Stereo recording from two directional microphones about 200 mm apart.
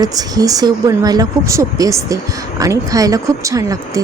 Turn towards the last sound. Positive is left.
turn(degrees=-15)  # may be behind; listen again after turning